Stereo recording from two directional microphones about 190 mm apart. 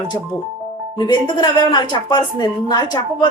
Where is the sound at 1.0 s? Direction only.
20° left (ahead or behind).